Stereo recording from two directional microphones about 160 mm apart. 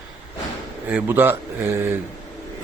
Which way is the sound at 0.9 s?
10° right (ahead or behind).